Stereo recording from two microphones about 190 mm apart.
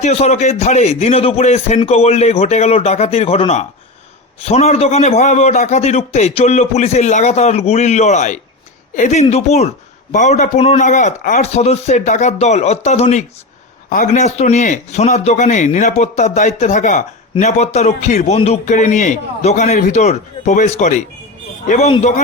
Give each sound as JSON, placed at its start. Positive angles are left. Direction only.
{"t": 0.0, "sound": "speech", "side_deg": 35}